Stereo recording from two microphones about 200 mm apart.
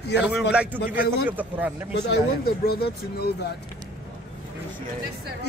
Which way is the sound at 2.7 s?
50° left (ahead or behind).